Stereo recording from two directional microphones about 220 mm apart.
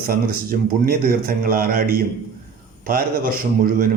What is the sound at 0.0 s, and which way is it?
A man's voice, 40° right (ahead or behind).